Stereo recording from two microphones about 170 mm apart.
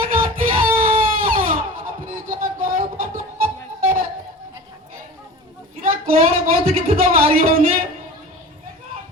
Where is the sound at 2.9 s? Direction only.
55° right (ahead or behind).